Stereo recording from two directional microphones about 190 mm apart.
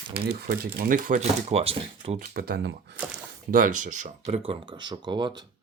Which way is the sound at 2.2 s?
55° right (ahead or behind).